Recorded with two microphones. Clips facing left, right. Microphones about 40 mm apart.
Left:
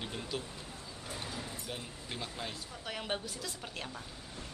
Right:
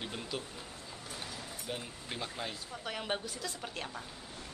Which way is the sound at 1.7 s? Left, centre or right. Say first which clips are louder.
Right 2 dB; centre.